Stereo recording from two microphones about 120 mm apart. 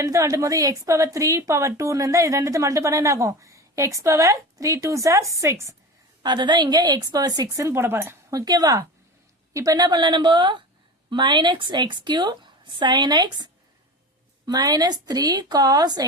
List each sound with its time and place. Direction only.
0.0 s a woman's voice: 25° right (ahead or behind)
6.2 s speech: 40° right (ahead or behind)